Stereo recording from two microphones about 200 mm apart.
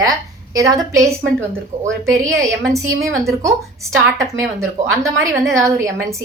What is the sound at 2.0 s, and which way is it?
A woman's voice, 15° right (ahead or behind).